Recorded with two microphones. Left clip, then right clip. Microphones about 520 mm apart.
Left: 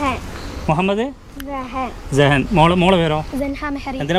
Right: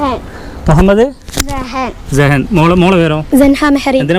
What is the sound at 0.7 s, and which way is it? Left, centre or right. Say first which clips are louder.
Speech: right 10 dB; right.